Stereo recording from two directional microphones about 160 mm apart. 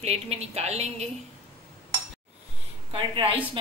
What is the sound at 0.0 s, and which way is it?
A woman's voice, 40° right (ahead or behind).